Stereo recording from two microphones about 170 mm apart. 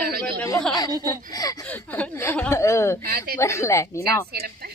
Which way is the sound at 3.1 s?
60° right (ahead or behind).